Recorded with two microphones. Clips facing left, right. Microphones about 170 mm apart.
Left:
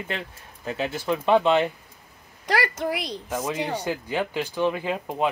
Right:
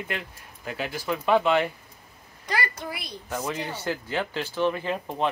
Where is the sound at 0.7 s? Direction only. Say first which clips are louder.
Left 3 dB; 25° left (ahead or behind).